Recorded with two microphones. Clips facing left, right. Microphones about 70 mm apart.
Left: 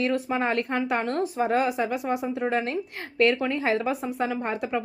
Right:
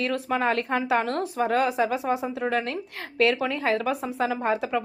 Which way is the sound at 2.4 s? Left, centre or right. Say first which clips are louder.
Even; centre.